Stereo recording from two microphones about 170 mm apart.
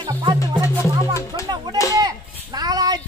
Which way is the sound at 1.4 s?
25° right (ahead or behind).